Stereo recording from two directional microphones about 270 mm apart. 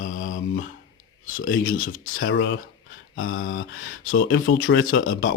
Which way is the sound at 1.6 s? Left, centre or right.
Left.